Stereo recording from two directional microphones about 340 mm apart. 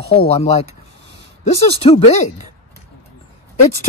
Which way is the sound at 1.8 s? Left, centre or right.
Centre.